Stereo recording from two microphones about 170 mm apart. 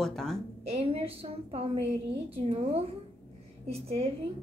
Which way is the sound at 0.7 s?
35° right (ahead or behind).